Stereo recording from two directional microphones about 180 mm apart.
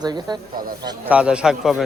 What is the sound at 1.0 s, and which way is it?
Speech, 5° right (ahead or behind).